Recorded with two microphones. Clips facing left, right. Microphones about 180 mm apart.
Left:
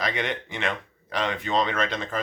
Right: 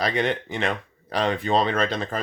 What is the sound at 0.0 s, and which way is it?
Speech, 35° right (ahead or behind).